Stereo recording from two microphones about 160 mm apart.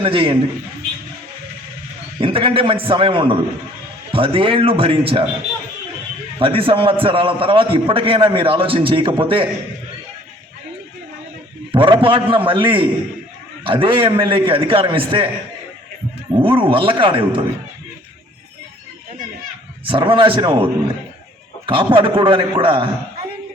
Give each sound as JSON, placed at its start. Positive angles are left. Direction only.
{"t": 0.0, "sound": "a man's voice", "side_deg": -35}
{"t": 2.2, "sound": "a man's voice", "side_deg": -35}
{"t": 6.4, "sound": "a man's voice", "side_deg": -35}
{"t": 11.7, "sound": "a man's voice", "side_deg": -30}
{"t": 16.3, "sound": "a man's voice", "side_deg": -35}
{"t": 19.8, "sound": "a man's voice", "side_deg": -35}